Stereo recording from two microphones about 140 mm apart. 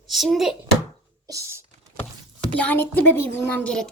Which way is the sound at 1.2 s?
20° right (ahead or behind).